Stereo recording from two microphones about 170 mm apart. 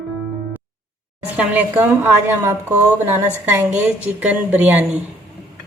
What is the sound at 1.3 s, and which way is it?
A woman's voice, 10° right (ahead or behind).